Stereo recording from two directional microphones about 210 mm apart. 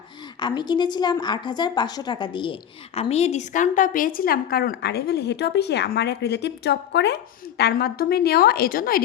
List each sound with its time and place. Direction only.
0.3 s a woman's voice: 20° left (ahead or behind); by 9.0 s 45° left (ahead or behind)